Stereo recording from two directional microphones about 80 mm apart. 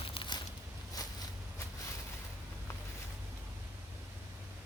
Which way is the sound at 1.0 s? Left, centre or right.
Left.